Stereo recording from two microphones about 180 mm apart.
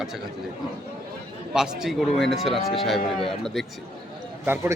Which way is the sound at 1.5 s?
5° right (ahead or behind).